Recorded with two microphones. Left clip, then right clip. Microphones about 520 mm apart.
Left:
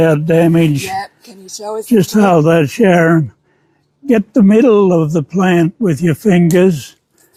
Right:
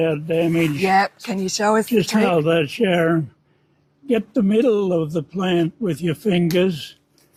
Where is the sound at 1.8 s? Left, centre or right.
Left.